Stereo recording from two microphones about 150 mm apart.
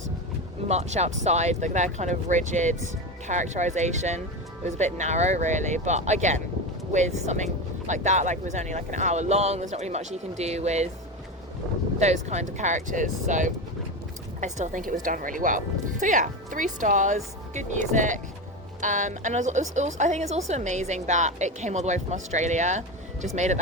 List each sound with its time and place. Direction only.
0.7 s speech: 45° right (ahead or behind)
11.9 s speech: 50° right (ahead or behind)